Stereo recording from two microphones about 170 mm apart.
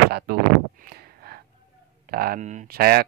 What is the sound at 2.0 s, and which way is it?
Speech, 60° right (ahead or behind).